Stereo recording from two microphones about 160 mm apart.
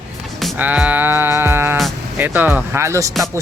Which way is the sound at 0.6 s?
10° right (ahead or behind).